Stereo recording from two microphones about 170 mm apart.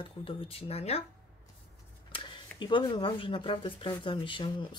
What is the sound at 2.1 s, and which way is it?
Speech, 30° left (ahead or behind).